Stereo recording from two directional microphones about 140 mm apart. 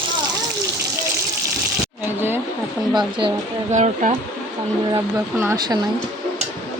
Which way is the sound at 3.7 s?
55° right (ahead or behind).